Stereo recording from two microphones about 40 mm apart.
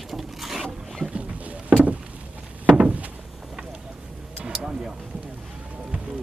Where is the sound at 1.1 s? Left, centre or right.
Right.